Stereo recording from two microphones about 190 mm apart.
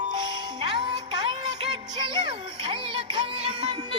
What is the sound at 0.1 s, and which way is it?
Music, 25° right (ahead or behind).